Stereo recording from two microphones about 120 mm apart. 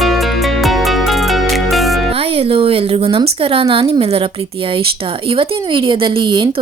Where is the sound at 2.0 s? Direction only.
55° right (ahead or behind).